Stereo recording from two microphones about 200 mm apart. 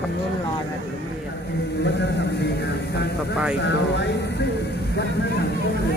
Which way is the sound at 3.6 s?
60° left (ahead or behind).